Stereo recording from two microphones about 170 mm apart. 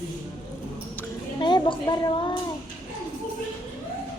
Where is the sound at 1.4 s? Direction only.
25° left (ahead or behind).